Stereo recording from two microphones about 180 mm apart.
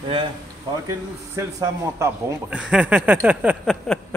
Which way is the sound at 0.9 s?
15° right (ahead or behind).